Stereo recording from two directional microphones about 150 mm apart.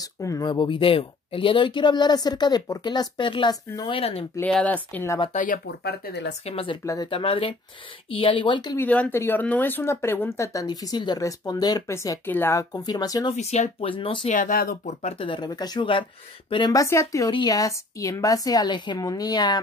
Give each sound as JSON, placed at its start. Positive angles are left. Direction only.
{"t": 0.0, "sound": "speech", "side_deg": 25}
{"t": 4.4, "sound": "speech", "side_deg": 10}
{"t": 5.3, "sound": "speech", "side_deg": 60}
{"t": 6.4, "sound": "speech", "side_deg": 40}
{"t": 8.7, "sound": "speech", "side_deg": 10}
{"t": 13.3, "sound": "speech", "side_deg": 45}
{"t": 14.2, "sound": "speech", "side_deg": 60}
{"t": 14.9, "sound": "speech", "side_deg": 45}